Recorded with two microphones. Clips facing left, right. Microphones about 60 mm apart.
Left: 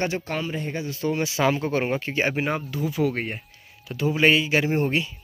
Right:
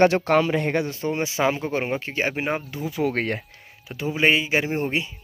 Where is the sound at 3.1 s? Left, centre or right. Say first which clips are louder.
Right 5 dB; right.